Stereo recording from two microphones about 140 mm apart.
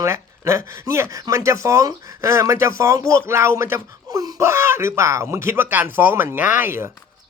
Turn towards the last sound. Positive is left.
turn(degrees=-15)  # may be behind; listen again after turning